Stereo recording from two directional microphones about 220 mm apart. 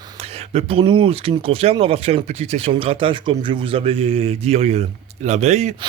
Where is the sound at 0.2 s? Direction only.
25° right (ahead or behind).